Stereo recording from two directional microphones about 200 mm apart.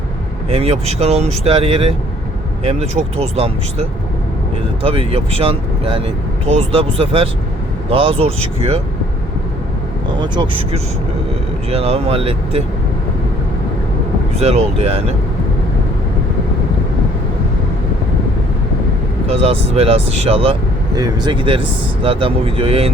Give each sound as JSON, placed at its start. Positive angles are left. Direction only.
{"t": 0.5, "sound": "speech", "side_deg": -30}
{"t": 10.2, "sound": "speech", "side_deg": -25}
{"t": 14.3, "sound": "speech", "side_deg": -30}
{"t": 19.3, "sound": "speech", "side_deg": -30}